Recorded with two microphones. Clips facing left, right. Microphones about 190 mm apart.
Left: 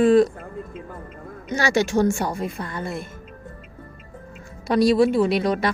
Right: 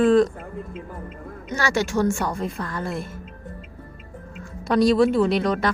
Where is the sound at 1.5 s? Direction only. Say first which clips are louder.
Left 3 dB; 15° left (ahead or behind).